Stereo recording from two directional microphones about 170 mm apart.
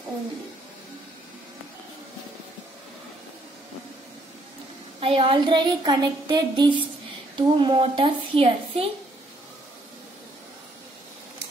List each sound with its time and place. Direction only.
5.0 s a woman's voice: 30° right (ahead or behind)